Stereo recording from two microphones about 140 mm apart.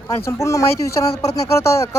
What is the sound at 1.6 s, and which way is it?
Speech, 20° left (ahead or behind).